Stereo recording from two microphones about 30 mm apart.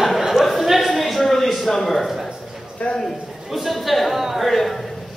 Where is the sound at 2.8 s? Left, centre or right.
Left.